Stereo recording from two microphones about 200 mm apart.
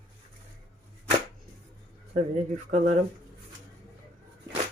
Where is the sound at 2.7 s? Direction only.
35° right (ahead or behind).